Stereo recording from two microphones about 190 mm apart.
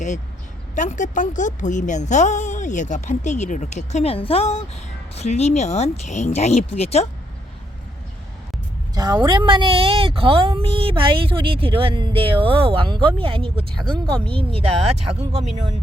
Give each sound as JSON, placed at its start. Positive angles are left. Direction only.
{"t": 0.8, "sound": "a woman's voice", "side_deg": 40}
{"t": 9.0, "sound": "a woman's voice", "side_deg": -20}